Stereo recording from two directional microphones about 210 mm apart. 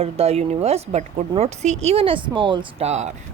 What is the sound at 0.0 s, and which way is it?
Speech, 30° right (ahead or behind).